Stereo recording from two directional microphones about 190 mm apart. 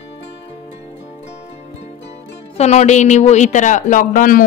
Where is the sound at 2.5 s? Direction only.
35° left (ahead or behind).